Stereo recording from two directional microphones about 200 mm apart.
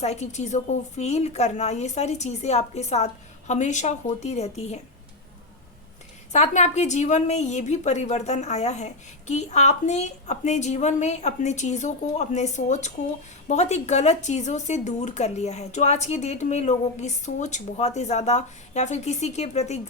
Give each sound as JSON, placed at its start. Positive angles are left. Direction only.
{"t": 0.0, "sound": "a woman's voice", "side_deg": 35}
{"t": 6.3, "sound": "a woman's voice", "side_deg": 35}